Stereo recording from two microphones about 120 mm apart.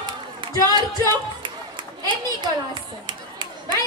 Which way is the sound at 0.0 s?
40° right (ahead or behind).